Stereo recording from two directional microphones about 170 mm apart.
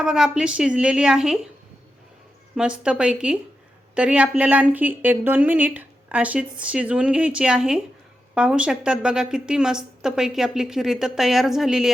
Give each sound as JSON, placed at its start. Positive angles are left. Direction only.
{"t": 0.0, "sound": "a woman's voice", "side_deg": -5}
{"t": 2.6, "sound": "a woman's voice", "side_deg": -5}